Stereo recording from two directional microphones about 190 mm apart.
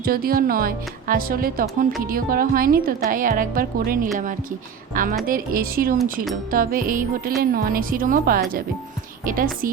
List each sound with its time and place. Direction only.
0.0 s a woman's voice: 50° right (ahead or behind)
5.2 s a woman's voice: 50° right (ahead or behind)